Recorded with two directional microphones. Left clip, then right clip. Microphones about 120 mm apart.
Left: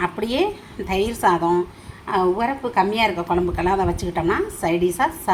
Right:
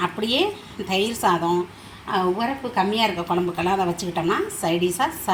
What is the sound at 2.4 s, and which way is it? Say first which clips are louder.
Speech: left 3 dB; 35° left (ahead or behind).